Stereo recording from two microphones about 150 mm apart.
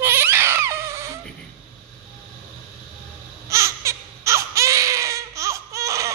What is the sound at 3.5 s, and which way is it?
Baby cry, 20° right (ahead or behind).